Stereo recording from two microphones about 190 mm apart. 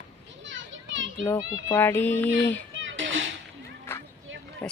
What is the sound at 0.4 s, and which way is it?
Children playing, 80° right.